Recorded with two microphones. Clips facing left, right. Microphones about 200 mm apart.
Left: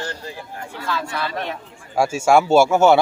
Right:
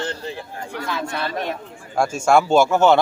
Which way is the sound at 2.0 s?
10° left (ahead or behind).